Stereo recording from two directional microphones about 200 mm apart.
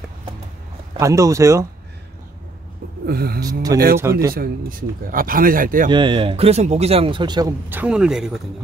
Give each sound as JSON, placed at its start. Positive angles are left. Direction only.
{"t": 0.9, "sound": "speech", "side_deg": -15}
{"t": 3.1, "sound": "speech", "side_deg": -50}
{"t": 3.3, "sound": "speech", "side_deg": -20}
{"t": 4.3, "sound": "speech", "side_deg": -45}
{"t": 5.9, "sound": "speech", "side_deg": -25}
{"t": 7.7, "sound": "a man's voice", "side_deg": -5}